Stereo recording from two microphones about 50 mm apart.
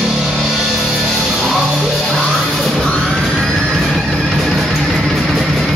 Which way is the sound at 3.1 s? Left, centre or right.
Centre.